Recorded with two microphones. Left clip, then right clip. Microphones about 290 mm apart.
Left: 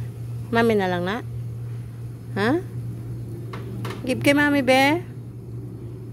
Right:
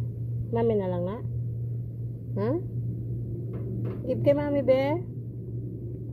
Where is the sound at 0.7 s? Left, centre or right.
Left.